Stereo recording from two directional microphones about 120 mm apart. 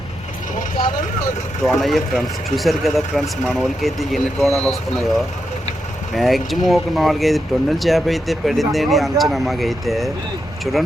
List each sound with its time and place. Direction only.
1.6 s speech: centre (ahead or behind)
6.1 s speech: centre (ahead or behind)